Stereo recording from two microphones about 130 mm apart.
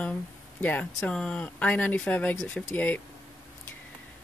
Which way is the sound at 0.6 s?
10° left (ahead or behind).